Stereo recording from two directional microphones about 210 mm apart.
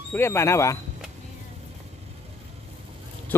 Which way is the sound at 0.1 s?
10° left (ahead or behind).